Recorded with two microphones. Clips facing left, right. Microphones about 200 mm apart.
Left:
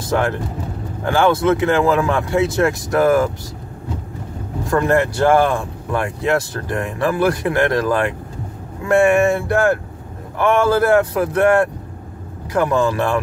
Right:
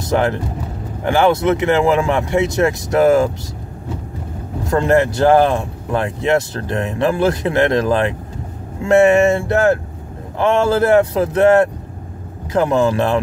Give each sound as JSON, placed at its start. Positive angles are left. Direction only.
{"t": 0.0, "sound": "speech", "side_deg": -20}
{"t": 4.6, "sound": "speech", "side_deg": -20}